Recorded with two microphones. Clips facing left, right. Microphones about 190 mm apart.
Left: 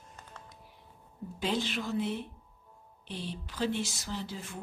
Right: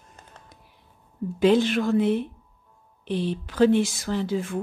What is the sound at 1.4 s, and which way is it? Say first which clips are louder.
Speech: right 13 dB; 65° right (ahead or behind).